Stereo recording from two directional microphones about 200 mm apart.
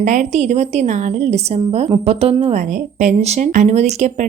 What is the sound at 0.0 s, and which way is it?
A woman's voice, 35° right (ahead or behind).